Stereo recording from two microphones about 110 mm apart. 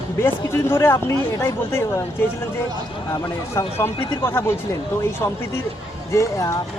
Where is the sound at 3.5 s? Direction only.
25° left (ahead or behind).